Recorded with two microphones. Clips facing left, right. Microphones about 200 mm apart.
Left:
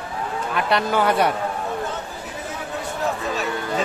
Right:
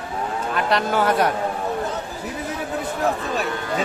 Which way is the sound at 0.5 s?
Centre (ahead or behind).